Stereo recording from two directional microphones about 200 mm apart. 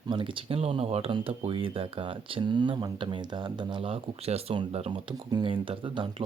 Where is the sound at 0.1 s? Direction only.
25° right (ahead or behind).